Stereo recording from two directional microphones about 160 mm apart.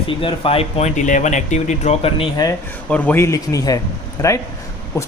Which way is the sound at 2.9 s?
10° left (ahead or behind).